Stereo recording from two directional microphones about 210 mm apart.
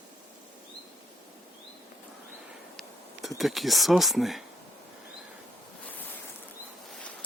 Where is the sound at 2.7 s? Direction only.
Centre (ahead or behind).